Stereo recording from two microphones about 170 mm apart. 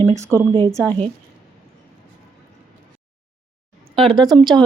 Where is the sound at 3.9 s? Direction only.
30° right (ahead or behind).